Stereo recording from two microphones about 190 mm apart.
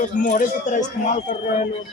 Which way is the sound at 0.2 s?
45° left (ahead or behind).